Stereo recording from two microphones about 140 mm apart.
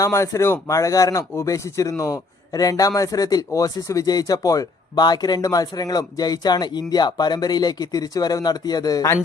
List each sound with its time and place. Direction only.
0.0 s speech: 20° left (ahead or behind)